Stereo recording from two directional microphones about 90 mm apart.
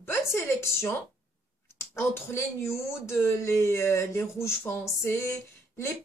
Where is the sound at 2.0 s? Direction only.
30° left (ahead or behind).